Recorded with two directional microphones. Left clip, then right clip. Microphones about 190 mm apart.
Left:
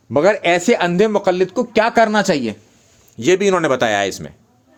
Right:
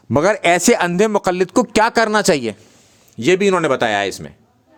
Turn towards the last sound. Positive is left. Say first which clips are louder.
# left 1 dB
turn(degrees=0)  # may be behind; listen again after turning